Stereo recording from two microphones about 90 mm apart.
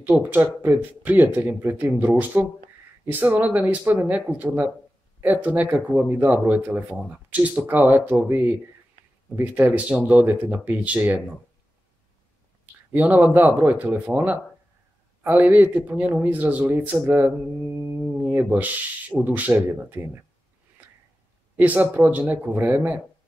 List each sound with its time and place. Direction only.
0.0 s a man's voice: 20° right (ahead or behind)
12.9 s a man's voice: 20° right (ahead or behind)
20.8 s a sound: 20° right (ahead or behind)
21.5 s a man's voice: 20° right (ahead or behind)